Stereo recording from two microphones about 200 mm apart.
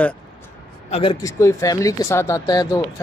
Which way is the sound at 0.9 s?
25° left (ahead or behind).